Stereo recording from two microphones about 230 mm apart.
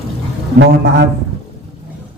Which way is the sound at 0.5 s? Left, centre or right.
Right.